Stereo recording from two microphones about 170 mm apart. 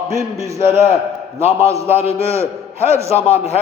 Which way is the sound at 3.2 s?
35° left (ahead or behind).